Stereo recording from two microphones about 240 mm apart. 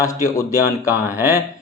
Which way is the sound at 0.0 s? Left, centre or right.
Centre.